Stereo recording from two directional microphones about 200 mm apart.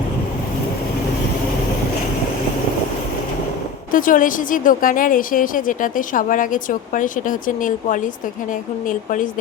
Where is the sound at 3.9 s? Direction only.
40° left (ahead or behind).